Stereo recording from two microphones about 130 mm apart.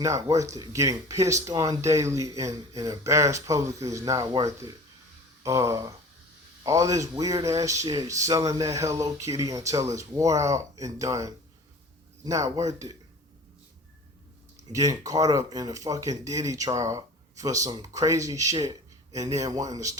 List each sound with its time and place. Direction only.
0.0 s speech: 25° right (ahead or behind)
14.7 s speech: 25° right (ahead or behind)